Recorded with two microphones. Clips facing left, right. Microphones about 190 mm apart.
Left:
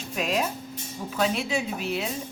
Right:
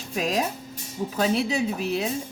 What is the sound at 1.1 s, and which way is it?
Speech, 40° right (ahead or behind).